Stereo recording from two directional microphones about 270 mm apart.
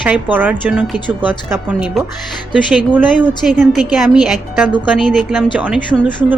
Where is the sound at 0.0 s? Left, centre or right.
Centre.